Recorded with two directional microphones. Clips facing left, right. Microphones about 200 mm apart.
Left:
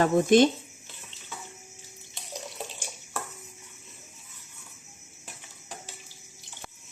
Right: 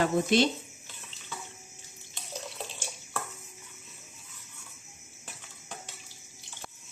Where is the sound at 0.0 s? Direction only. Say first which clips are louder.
Left 5 dB; 50° left (ahead or behind).